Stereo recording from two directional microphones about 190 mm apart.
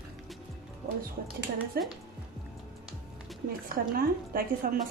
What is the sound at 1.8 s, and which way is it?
Speech, 55° right (ahead or behind).